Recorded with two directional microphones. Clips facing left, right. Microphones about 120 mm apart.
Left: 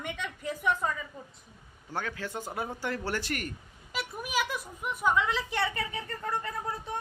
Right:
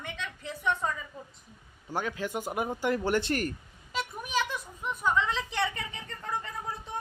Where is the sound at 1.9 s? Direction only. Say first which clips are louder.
Right 3 dB; 15° right (ahead or behind).